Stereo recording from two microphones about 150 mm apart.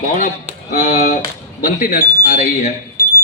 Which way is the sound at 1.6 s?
65° left (ahead or behind).